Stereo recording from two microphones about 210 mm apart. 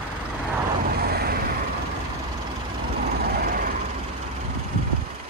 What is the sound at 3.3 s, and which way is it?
Vehicle, 45° right (ahead or behind).